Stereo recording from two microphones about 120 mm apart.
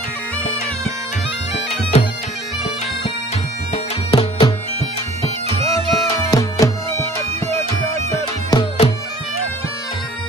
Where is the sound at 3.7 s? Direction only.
50° left (ahead or behind).